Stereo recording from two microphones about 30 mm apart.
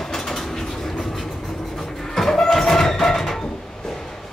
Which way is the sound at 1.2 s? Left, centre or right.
Centre.